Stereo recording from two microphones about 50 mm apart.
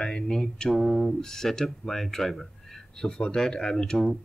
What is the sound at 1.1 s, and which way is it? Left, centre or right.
Speech, centre.